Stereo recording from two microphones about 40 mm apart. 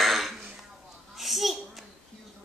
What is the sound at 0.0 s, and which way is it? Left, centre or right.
Throat clearing, centre.